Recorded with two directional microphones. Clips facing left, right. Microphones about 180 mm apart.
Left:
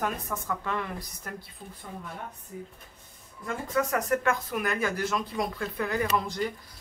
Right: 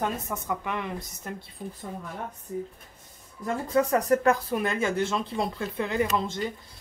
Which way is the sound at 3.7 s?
30° right (ahead or behind).